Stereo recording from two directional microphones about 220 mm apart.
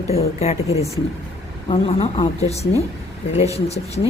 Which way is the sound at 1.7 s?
25° left (ahead or behind).